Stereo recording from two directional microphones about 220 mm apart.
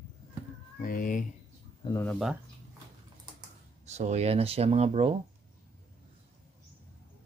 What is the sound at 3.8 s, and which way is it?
Speech, 30° right (ahead or behind).